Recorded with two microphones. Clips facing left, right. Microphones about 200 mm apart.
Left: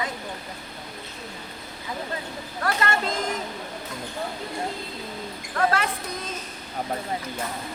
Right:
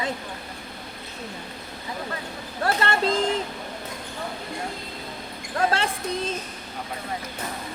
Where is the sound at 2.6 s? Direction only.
30° right (ahead or behind).